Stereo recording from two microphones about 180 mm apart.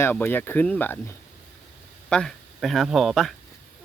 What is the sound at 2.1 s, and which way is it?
Speech, 5° left (ahead or behind).